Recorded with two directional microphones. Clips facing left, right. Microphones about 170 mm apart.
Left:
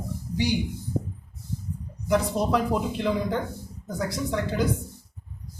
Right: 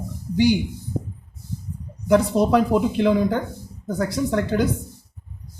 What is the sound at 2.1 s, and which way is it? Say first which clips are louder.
Speech: right 6 dB; 65° right (ahead or behind).